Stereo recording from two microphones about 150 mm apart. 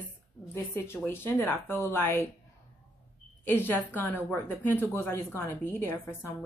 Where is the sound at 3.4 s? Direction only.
15° left (ahead or behind).